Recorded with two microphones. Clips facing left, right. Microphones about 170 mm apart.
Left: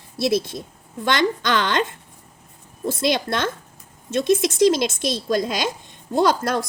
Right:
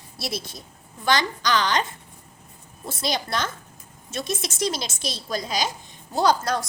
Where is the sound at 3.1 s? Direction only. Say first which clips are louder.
Left 1 dB; 55° left (ahead or behind).